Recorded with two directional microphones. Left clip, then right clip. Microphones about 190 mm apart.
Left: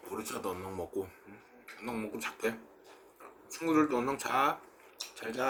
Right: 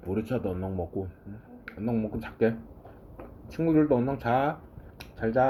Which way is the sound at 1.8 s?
20° left (ahead or behind).